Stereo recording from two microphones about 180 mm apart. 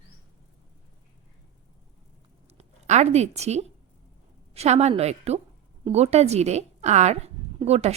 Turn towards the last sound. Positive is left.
turn(degrees=-35)  # may be behind; listen again after turning